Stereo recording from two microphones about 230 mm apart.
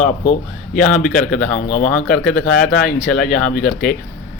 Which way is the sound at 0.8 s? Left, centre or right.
Centre.